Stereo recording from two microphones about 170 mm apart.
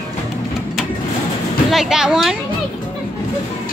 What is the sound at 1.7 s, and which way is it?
Speech, 5° right (ahead or behind).